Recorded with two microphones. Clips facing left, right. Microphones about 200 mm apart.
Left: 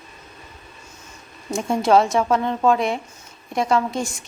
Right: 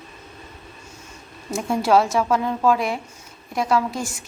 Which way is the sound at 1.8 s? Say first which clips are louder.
Left 2 dB; 5° right (ahead or behind).